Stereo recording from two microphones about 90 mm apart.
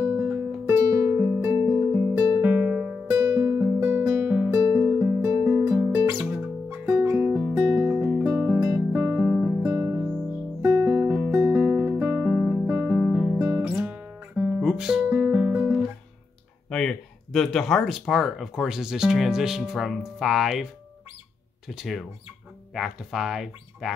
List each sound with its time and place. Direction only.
0.0 s music: 20° right (ahead or behind)
0.7 s music: 40° right (ahead or behind)
1.4 s music: 30° right (ahead or behind)
2.4 s music: 15° right (ahead or behind)
3.1 s music: 30° right (ahead or behind)
4.3 s music: 15° right (ahead or behind)
9.6 s music: 25° right (ahead or behind); by 12.7 s 10° right (ahead or behind)
12.7 s guitar: 10° right (ahead or behind)
15.0 s music: 15° right (ahead or behind)
16.6 s speech: 5° left (ahead or behind)
21.6 s speech: centre (ahead or behind)